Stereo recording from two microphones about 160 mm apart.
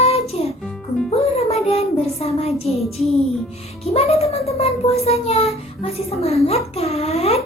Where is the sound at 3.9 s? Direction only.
40° left (ahead or behind).